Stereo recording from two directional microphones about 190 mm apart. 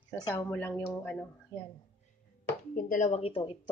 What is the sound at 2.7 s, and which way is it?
Speech, 50° left (ahead or behind).